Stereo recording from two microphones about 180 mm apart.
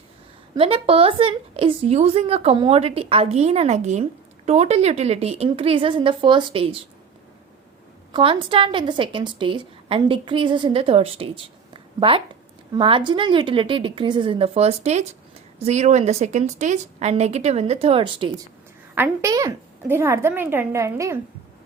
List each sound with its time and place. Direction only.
0.5 s a woman's voice: 30° right (ahead or behind)
8.1 s a woman's voice: 30° right (ahead or behind)
18.9 s a woman's voice: 15° right (ahead or behind)